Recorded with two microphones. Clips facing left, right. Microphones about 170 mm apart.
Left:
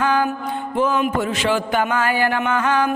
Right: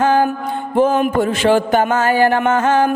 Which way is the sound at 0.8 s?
50° right (ahead or behind).